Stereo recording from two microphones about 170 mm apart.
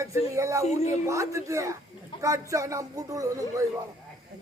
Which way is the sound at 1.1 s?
20° right (ahead or behind).